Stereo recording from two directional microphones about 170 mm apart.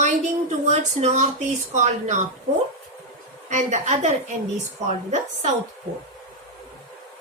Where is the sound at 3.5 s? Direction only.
45° right (ahead or behind).